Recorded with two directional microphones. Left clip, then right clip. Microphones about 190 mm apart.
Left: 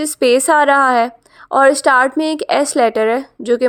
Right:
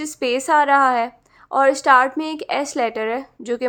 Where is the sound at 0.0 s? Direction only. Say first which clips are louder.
Left 9 dB; 30° left (ahead or behind).